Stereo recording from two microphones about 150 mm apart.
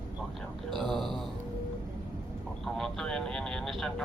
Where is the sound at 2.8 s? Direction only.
5° left (ahead or behind).